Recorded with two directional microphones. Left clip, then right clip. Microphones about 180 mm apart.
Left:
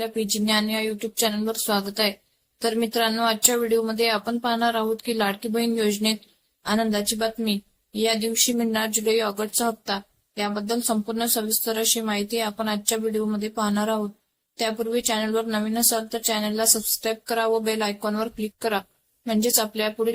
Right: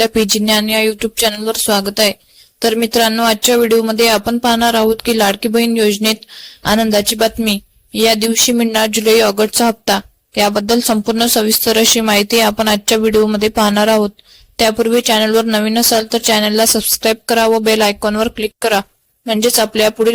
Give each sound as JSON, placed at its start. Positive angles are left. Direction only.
{"t": 0.0, "sound": "speech", "side_deg": -40}